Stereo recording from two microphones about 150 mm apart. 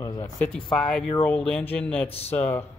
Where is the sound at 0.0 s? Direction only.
25° left (ahead or behind).